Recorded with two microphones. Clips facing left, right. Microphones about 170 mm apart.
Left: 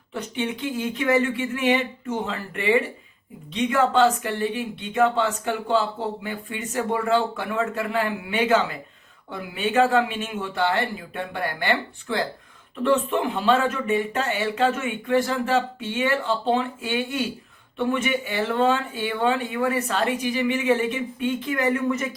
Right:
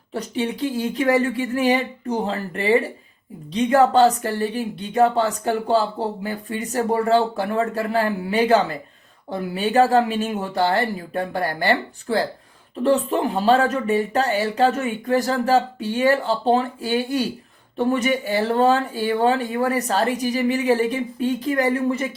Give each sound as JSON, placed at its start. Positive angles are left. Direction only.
{"t": 0.1, "sound": "speech", "side_deg": -35}